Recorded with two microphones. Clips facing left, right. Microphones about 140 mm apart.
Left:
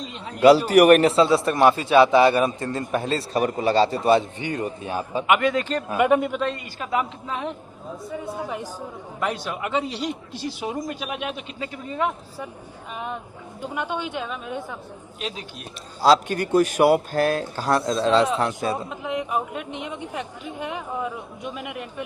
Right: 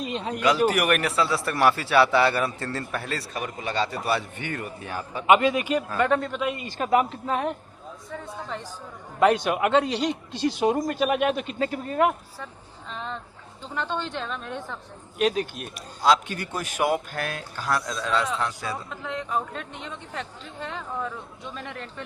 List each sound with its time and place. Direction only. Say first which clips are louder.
0.1 s a man's voice: right 7 dB; 75° right (ahead or behind)
0.3 s speech: left 8 dB; 35° left (ahead or behind)
1.0 s a man's voice: left 7 dB; 25° left (ahead or behind)
3.3 s a man's voice: left 10 dB; 35° left (ahead or behind); by 5.2 s 15° left (ahead or behind)
5.2 s a man's voice: right 2 dB; 25° right (ahead or behind)
5.9 s a man's voice: left 7 dB; 15° left (ahead or behind)
6.7 s speech: right 7 dB; 45° right (ahead or behind)
8.1 s a man's voice: left 4 dB; 10° left (ahead or behind)
9.2 s a man's voice: right 7 dB; 70° right (ahead or behind)
10.6 s speech: right 6 dB; 60° right (ahead or behind)
10.9 s speech: right 7 dB; 45° right (ahead or behind)
12.9 s a man's voice: left 3 dB; 10° left (ahead or behind)
15.2 s speech: right 10 dB; 50° right (ahead or behind)
16.0 s a man's voice: left 4 dB; 35° left (ahead or behind); by 22.0 s 15° left (ahead or behind)